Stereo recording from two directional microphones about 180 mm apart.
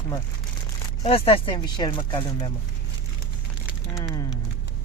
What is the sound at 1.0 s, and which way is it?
Speech, 30° left (ahead or behind).